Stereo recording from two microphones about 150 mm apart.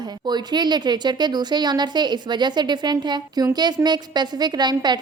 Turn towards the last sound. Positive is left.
turn(degrees=-30)  # may be behind; listen again after turning